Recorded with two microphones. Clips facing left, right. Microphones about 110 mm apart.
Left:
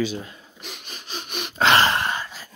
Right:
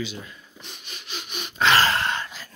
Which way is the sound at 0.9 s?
40° left (ahead or behind).